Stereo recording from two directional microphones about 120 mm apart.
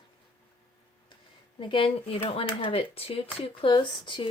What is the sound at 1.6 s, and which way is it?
Speech, 45° left (ahead or behind).